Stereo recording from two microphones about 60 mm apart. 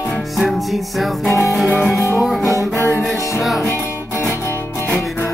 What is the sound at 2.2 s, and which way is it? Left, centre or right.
Music, centre.